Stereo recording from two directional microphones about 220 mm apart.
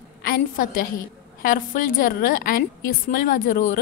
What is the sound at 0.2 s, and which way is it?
A woman's voice, 40° left (ahead or behind).